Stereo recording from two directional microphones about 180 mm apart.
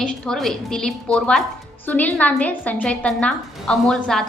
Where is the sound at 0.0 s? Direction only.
5° left (ahead or behind).